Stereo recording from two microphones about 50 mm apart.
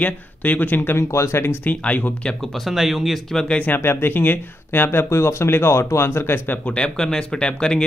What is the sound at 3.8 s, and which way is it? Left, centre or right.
Speech, left.